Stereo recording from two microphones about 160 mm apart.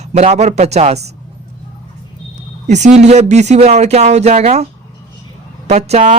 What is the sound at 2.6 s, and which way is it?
Speech, 45° right (ahead or behind).